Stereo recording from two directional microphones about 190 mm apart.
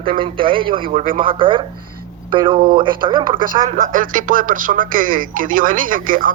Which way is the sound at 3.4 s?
45° right (ahead or behind).